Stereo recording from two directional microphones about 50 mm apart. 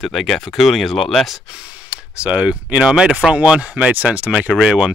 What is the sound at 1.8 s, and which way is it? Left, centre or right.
Speech, right.